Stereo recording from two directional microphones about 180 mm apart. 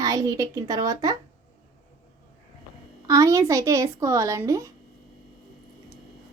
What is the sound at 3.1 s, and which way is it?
Speech, 20° right (ahead or behind).